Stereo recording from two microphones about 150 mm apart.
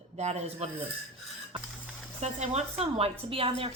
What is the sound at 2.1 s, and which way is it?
A woman's voice, 45° right (ahead or behind).